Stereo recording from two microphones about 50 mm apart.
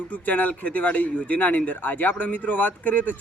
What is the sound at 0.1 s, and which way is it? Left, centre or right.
Speech, left.